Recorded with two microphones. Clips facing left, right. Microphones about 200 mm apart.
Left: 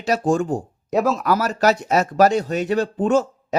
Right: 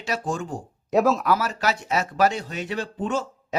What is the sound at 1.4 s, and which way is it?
Speech, 40° left (ahead or behind).